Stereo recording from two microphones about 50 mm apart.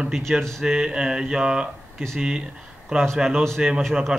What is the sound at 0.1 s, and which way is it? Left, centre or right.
Speech, centre.